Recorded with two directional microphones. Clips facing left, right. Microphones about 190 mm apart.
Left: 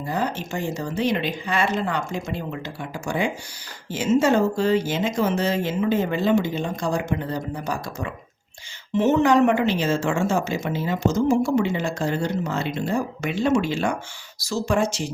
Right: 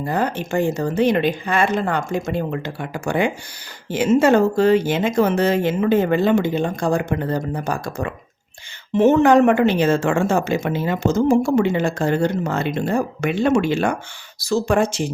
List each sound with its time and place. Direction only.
0.1 s a woman's voice: 55° right (ahead or behind)